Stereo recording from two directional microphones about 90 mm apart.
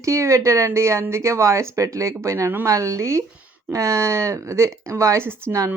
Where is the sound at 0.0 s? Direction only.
35° right (ahead or behind).